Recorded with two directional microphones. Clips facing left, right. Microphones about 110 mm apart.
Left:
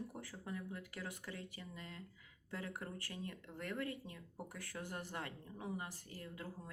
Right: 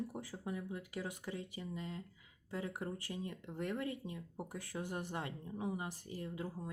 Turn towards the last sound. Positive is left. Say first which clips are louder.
# right 6 dB
turn(degrees=-20)  # may be behind; listen again after turning